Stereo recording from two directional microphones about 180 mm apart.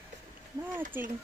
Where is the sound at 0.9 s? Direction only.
10° right (ahead or behind).